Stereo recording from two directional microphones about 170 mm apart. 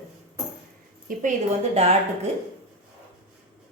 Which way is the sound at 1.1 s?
55° right (ahead or behind).